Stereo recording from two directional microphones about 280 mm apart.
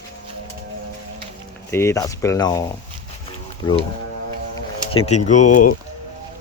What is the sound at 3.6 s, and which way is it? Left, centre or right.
Speech, centre.